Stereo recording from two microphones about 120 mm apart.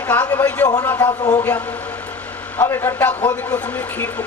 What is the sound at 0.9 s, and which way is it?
Speech, 30° left (ahead or behind).